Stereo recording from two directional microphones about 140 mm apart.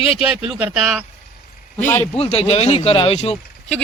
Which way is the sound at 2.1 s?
45° left (ahead or behind).